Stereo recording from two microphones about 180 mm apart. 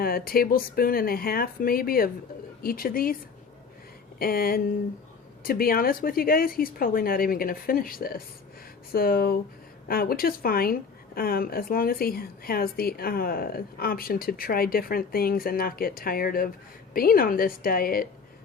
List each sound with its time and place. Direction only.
0.0 s a woman's voice: 55° left (ahead or behind)
4.2 s a woman's voice: 55° left (ahead or behind)